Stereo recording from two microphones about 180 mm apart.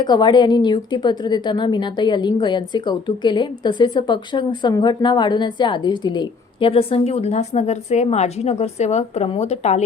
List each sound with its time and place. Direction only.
0.0 s a woman's voice: 25° left (ahead or behind); by 9.8 s 40° left (ahead or behind)